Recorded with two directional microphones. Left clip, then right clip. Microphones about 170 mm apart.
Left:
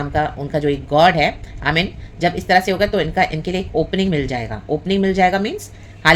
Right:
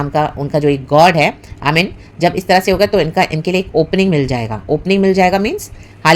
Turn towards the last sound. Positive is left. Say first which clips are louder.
# right 2 dB
turn(degrees=-35)  # may be behind; listen again after turning